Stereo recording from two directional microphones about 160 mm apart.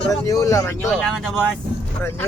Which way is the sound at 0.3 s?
20° left (ahead or behind).